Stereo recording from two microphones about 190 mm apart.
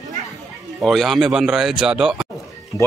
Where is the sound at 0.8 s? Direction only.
Centre (ahead or behind).